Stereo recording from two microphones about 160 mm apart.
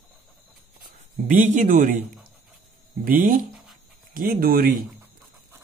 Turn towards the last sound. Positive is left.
turn(degrees=-70)  # may be behind; listen again after turning